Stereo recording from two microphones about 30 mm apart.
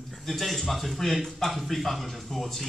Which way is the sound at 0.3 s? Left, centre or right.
Centre.